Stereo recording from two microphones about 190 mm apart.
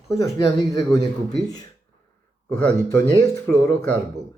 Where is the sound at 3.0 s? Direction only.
15° left (ahead or behind).